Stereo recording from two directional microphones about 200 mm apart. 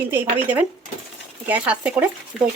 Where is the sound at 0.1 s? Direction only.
5° right (ahead or behind).